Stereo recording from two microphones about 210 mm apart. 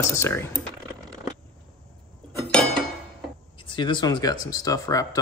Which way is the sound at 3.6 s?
25° left (ahead or behind).